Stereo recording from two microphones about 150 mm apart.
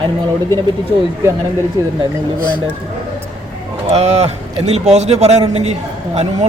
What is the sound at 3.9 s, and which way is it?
A man's voice, 45° right (ahead or behind).